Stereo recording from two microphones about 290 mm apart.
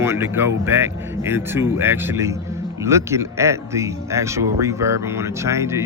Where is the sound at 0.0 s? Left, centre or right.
Centre.